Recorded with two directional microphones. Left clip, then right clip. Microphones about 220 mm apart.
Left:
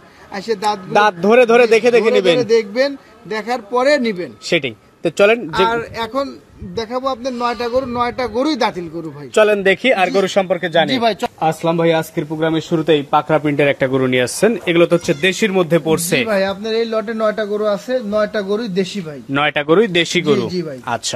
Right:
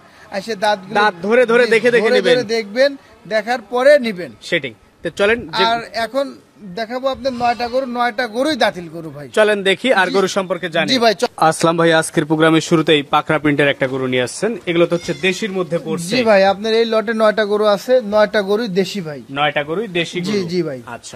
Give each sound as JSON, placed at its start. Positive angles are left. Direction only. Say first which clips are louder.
{"t": 0.3, "sound": "speech", "louder": "right 1 dB", "side_deg": -40}
{"t": 0.9, "sound": "a man's voice", "louder": "left 4 dB", "side_deg": 20}
{"t": 2.4, "sound": "speech", "louder": "left 1 dB", "side_deg": -40}
{"t": 5.0, "sound": "speech", "louder": "left 3 dB", "side_deg": 15}
{"t": 5.7, "sound": "speech", "louder": "right 1 dB", "side_deg": -40}
{"t": 9.3, "sound": "speech", "louder": "left 1 dB", "side_deg": 15}
{"t": 9.8, "sound": "speech", "louder": "even", "side_deg": -15}
{"t": 10.6, "sound": "speech", "louder": "left 4 dB", "side_deg": 0}
{"t": 10.9, "sound": "speech", "louder": "right 2 dB", "side_deg": -45}
{"t": 13.7, "sound": "speech", "louder": "left 2 dB", "side_deg": 10}
{"t": 15.2, "sound": "a man's voice", "louder": "left 4 dB", "side_deg": 25}
{"t": 16.3, "sound": "speech", "louder": "right 5 dB", "side_deg": -50}
{"t": 19.3, "sound": "a man's voice", "louder": "left 4 dB", "side_deg": 30}
{"t": 20.2, "sound": "speech", "louder": "left 3 dB", "side_deg": -45}